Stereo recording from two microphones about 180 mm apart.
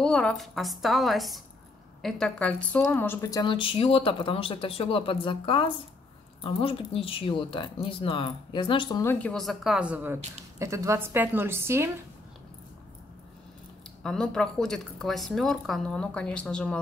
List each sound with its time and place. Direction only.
0.0 s speech: 5° left (ahead or behind); by 9.0 s 25° left (ahead or behind)
9.0 s a woman's voice: 10° left (ahead or behind); by 11.9 s 15° right (ahead or behind)
14.0 s speech: 5° left (ahead or behind)